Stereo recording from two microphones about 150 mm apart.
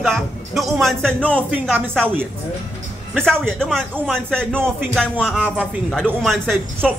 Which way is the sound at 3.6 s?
5° left (ahead or behind).